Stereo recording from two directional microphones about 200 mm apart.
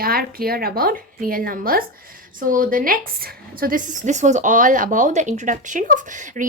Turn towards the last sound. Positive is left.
turn(degrees=-40)  # may be behind; listen again after turning